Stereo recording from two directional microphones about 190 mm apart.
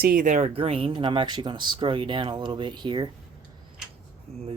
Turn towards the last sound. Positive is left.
turn(degrees=-35)  # may be behind; listen again after turning